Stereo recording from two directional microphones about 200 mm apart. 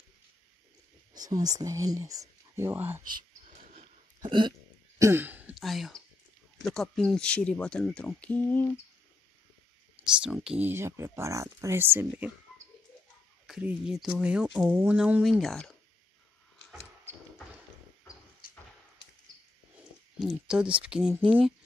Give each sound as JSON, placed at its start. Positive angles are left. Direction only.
{"t": 1.1, "sound": "speech", "side_deg": -20}
{"t": 3.4, "sound": "a sound", "side_deg": -40}
{"t": 4.2, "sound": "speech", "side_deg": -25}
{"t": 9.9, "sound": "speech", "side_deg": -5}
{"t": 13.5, "sound": "speech", "side_deg": -5}
{"t": 20.2, "sound": "speech", "side_deg": 0}
{"t": 21.2, "sound": "speech", "side_deg": -25}